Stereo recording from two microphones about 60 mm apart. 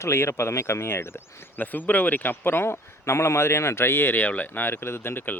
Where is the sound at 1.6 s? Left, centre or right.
Left.